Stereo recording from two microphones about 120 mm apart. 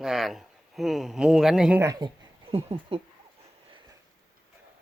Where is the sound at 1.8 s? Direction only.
30° right (ahead or behind).